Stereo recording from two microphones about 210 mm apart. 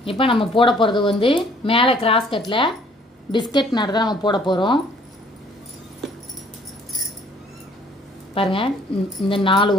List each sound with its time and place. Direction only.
0.0 s speech: 25° left (ahead or behind)
8.4 s speech: 25° left (ahead or behind)